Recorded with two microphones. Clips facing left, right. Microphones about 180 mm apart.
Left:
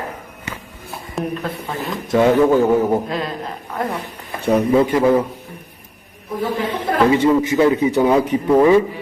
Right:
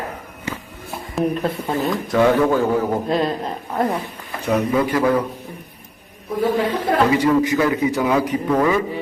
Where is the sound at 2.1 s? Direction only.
20° left (ahead or behind).